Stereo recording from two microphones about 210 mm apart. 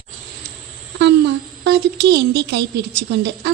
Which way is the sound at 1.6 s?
55° right (ahead or behind).